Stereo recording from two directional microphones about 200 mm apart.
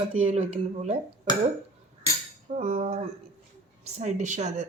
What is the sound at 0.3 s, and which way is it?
Speech, 35° right (ahead or behind).